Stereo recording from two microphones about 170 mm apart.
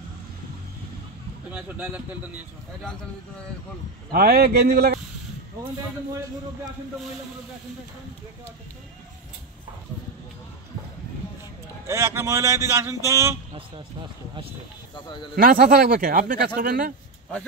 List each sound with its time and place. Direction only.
1.5 s speech: 10° right (ahead or behind)
4.1 s speech: 65° right (ahead or behind)
11.9 s speech: 15° right (ahead or behind)
15.3 s speech: 60° right (ahead or behind)